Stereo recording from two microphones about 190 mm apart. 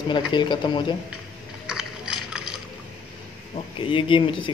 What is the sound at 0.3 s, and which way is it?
Speech, 25° left (ahead or behind).